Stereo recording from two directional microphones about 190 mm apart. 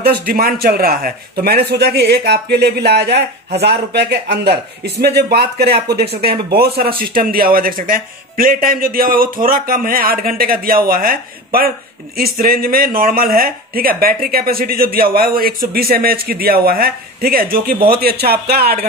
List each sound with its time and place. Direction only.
0.0 s a man's voice: 50° right (ahead or behind)